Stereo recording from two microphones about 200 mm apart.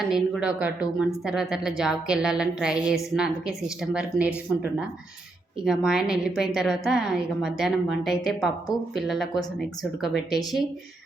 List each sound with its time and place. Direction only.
0.1 s a woman's voice: 5° right (ahead or behind)